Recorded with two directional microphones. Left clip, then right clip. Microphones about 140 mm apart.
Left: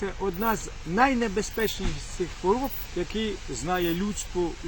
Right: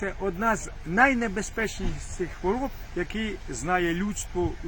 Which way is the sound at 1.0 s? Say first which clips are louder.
Right 1 dB; 15° right (ahead or behind).